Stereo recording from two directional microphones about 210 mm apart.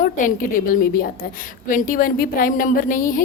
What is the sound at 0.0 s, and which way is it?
A woman's voice, 40° left (ahead or behind).